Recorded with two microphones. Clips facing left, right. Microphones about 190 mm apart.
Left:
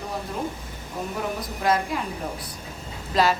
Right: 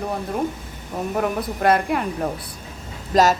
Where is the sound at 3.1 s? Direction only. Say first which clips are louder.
Right 5 dB; 45° right (ahead or behind).